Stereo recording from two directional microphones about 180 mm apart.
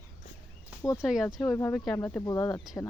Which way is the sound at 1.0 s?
Centre (ahead or behind).